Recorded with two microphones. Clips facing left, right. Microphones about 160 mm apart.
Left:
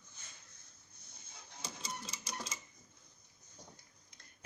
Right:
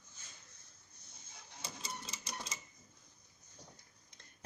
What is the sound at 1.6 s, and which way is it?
Printer, centre (ahead or behind).